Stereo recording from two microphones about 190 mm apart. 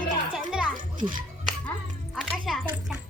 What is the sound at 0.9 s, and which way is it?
Speech, 45° right (ahead or behind).